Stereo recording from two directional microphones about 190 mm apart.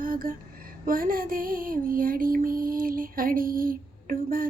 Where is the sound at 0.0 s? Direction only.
50° right (ahead or behind).